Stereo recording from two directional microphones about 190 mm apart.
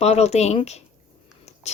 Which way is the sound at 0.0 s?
35° left (ahead or behind).